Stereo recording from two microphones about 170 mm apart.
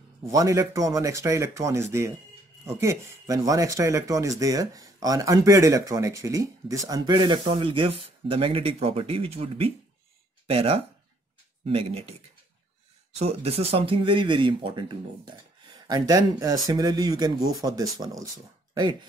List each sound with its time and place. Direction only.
0.3 s speech: 20° right (ahead or behind); by 12.2 s 35° right (ahead or behind)
13.2 s speech: 35° right (ahead or behind)